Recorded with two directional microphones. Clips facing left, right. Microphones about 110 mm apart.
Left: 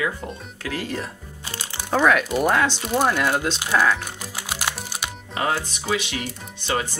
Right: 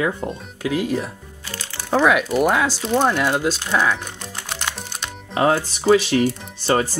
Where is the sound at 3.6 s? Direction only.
10° left (ahead or behind).